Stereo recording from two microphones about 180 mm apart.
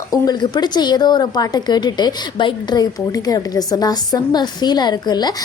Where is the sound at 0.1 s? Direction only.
25° left (ahead or behind).